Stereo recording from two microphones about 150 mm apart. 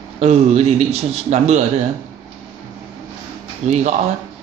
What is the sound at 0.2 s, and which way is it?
Speech, 45° right (ahead or behind).